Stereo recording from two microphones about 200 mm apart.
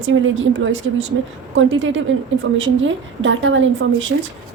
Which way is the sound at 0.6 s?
75° right (ahead or behind).